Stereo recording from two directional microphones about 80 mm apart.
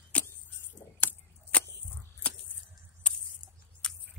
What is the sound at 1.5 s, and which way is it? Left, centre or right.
Whip, centre.